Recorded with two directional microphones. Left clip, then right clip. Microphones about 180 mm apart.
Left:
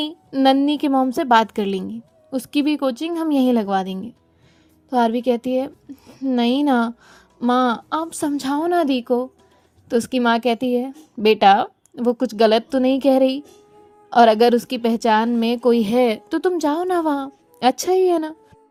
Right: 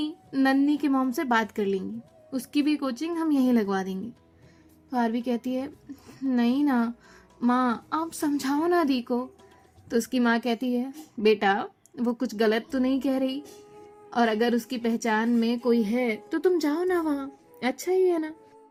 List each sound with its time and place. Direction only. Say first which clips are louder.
0.3 s a woman's voice: left 7 dB; 25° left (ahead or behind)
6.3 s a woman's voice: left 7 dB; 35° left (ahead or behind)